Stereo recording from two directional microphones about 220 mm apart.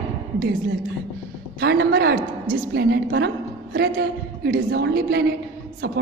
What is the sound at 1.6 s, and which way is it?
A woman's voice, 45° right (ahead or behind).